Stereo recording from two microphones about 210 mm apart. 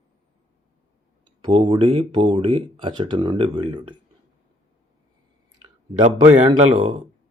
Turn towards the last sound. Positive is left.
turn(degrees=-30)  # may be behind; listen again after turning